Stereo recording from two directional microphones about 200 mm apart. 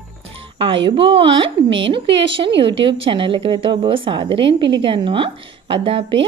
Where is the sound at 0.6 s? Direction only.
25° right (ahead or behind).